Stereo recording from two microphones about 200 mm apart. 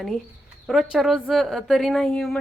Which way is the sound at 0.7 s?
Centre (ahead or behind).